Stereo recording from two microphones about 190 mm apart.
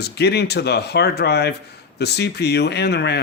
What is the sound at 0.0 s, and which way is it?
Speech, 60° left (ahead or behind).